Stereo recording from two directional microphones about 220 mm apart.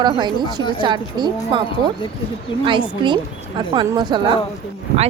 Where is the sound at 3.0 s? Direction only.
20° right (ahead or behind).